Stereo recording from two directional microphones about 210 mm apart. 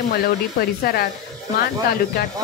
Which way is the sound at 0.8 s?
45° left (ahead or behind).